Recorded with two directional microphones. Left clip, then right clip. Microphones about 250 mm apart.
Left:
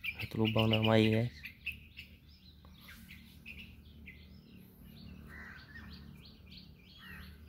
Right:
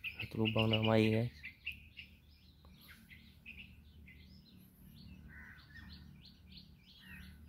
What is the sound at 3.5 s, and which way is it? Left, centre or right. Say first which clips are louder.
Bird: left 3 dB; left.